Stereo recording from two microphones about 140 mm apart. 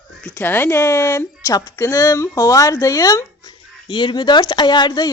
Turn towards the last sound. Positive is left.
turn(degrees=30)  # may be behind; listen again after turning